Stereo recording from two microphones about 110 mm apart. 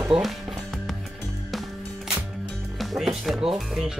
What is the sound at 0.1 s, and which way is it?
Speech, 5° right (ahead or behind).